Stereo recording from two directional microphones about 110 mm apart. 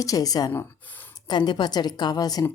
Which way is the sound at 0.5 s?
15° left (ahead or behind).